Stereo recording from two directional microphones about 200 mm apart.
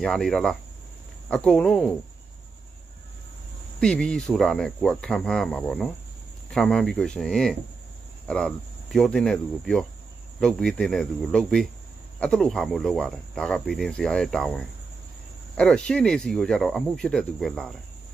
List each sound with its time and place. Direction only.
0.0 s speech: centre (ahead or behind)
3.8 s speech: 5° left (ahead or behind)